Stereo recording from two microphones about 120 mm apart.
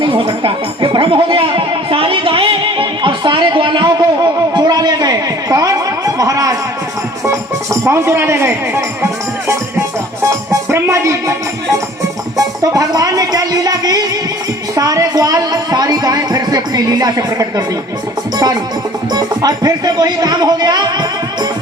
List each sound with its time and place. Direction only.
0.0 s music: 45° right (ahead or behind); by 6.6 s 30° right (ahead or behind)
7.3 s speech: 25° right (ahead or behind)
10.2 s music: 25° right (ahead or behind)
14.8 s a sound: 30° right (ahead or behind)
19.1 s speech: 35° right (ahead or behind)